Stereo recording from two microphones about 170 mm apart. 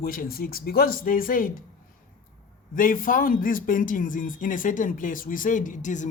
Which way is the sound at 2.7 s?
55° left (ahead or behind).